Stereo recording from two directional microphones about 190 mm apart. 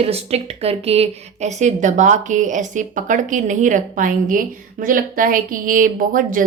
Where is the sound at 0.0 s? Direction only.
30° right (ahead or behind).